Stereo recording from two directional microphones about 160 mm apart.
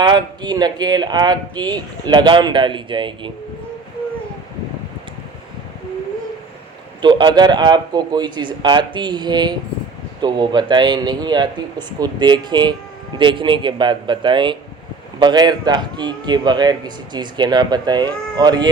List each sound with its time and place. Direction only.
0.0 s speech: 30° right (ahead or behind)
7.0 s a man's voice: 30° right (ahead or behind)